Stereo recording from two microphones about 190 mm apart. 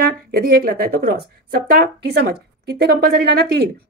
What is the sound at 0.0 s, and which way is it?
Speech, 50° right (ahead or behind).